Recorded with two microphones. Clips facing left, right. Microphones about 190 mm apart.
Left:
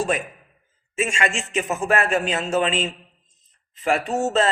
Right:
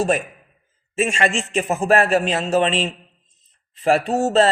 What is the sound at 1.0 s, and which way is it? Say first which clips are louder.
A man's voice: right 4 dB; 35° right (ahead or behind).